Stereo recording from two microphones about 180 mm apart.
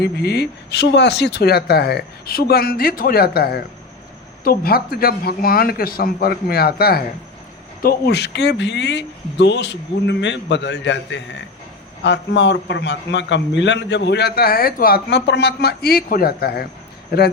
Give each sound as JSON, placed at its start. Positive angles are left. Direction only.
{"t": 0.0, "sound": "a man's voice", "side_deg": 65}